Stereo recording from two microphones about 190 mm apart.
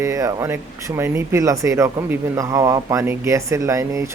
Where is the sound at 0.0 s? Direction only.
15° right (ahead or behind).